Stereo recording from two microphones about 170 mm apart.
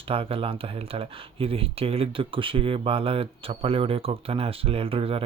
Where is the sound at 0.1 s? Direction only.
35° right (ahead or behind).